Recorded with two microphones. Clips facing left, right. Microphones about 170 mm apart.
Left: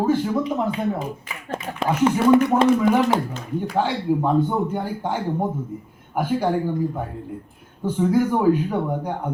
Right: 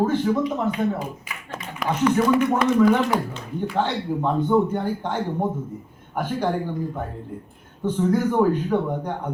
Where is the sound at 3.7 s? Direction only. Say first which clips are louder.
Left 3 dB; 10° left (ahead or behind).